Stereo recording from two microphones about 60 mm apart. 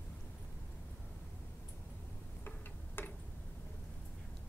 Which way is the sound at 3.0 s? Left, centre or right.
Left.